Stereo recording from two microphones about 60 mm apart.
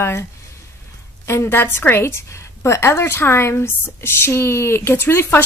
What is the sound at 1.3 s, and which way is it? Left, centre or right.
A woman's voice, left.